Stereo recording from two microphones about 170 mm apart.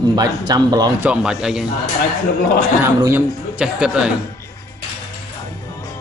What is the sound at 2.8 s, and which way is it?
A man's voice, 15° right (ahead or behind).